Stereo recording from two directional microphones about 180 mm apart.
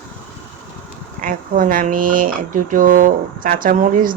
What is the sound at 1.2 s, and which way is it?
Speech, 50° right (ahead or behind).